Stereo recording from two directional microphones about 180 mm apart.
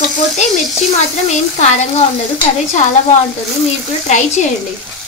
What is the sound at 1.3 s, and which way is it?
Speech, 40° left (ahead or behind).